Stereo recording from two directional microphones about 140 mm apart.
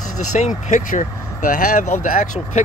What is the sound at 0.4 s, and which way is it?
Speech, 65° left (ahead or behind).